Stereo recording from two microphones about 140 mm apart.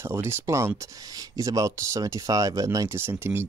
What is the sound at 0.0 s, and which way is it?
Speech, 20° right (ahead or behind).